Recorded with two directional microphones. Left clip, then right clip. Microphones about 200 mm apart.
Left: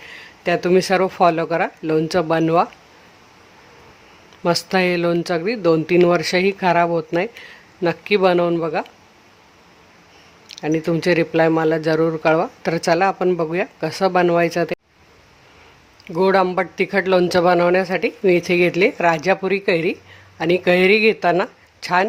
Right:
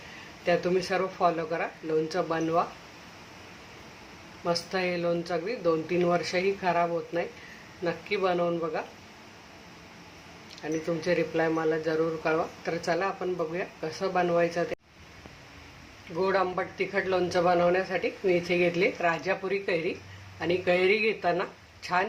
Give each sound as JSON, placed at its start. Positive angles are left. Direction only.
{"t": 0.4, "sound": "a man's voice", "side_deg": 50}
{"t": 4.4, "sound": "a man's voice", "side_deg": 50}
{"t": 10.5, "sound": "a man's voice", "side_deg": 50}
{"t": 16.1, "sound": "a man's voice", "side_deg": 50}